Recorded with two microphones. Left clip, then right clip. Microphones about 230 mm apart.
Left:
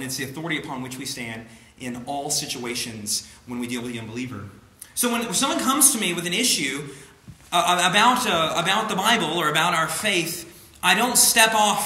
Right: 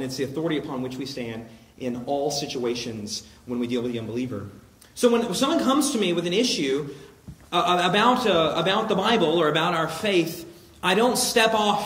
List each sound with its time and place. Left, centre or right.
0.0 s a man's voice: left